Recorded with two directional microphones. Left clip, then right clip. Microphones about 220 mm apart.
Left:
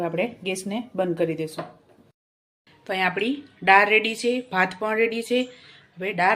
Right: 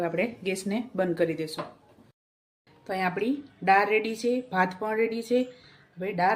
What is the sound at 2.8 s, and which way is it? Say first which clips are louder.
A woman's voice: left 4 dB; centre (ahead or behind).